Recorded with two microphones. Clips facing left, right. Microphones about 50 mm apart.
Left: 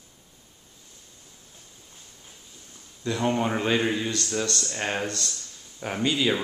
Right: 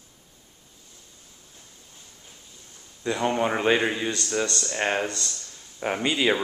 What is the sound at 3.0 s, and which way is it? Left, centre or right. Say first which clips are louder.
Speech: right 1 dB; centre.